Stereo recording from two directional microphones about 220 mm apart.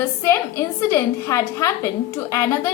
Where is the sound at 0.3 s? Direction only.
10° left (ahead or behind).